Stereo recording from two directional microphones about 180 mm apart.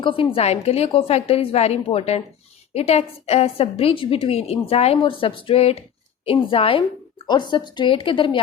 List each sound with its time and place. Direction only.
0.0 s a woman's voice: 30° left (ahead or behind)